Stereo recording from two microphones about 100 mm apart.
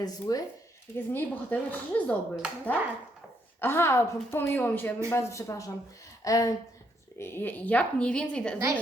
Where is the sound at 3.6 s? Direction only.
25° left (ahead or behind).